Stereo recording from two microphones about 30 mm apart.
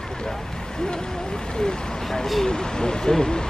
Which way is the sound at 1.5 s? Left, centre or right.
Centre.